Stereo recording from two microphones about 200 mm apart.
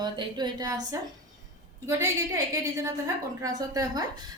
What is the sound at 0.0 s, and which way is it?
A woman's voice, 20° right (ahead or behind).